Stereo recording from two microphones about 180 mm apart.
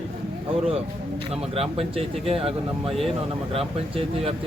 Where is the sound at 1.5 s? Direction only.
35° right (ahead or behind).